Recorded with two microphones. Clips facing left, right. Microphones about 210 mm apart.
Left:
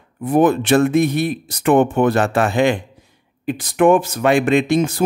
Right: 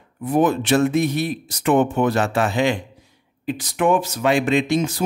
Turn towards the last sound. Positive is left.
turn(degrees=55)  # may be behind; listen again after turning